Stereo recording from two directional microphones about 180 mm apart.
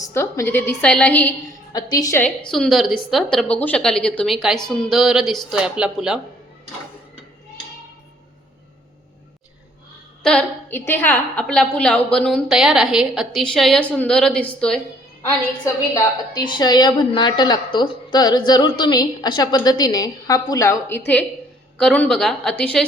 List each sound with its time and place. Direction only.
0.1 s a woman's voice: 15° left (ahead or behind)
1.7 s a woman's voice: 20° left (ahead or behind); by 6.1 s 5° right (ahead or behind)
10.2 s a woman's voice: 10° left (ahead or behind)
15.6 s a woman's voice: 20° left (ahead or behind)